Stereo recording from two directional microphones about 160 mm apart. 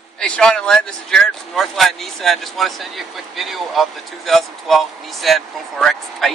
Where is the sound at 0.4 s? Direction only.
5° left (ahead or behind).